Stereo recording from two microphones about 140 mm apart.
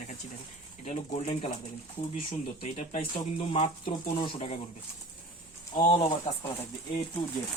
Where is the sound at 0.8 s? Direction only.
50° left (ahead or behind).